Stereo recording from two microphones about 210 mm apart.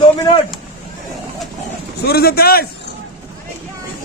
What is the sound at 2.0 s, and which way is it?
Speech, 50° left (ahead or behind).